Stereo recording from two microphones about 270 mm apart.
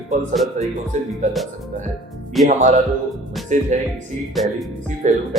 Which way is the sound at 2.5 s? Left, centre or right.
Right.